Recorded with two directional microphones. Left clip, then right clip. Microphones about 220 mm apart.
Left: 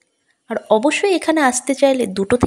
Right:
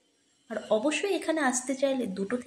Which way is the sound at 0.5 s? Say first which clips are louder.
Left 12 dB; 40° left (ahead or behind).